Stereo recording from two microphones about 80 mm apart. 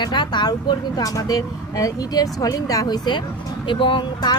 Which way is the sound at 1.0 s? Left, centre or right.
Left.